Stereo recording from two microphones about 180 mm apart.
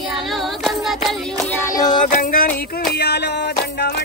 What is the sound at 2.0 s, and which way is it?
Music, 50° left (ahead or behind).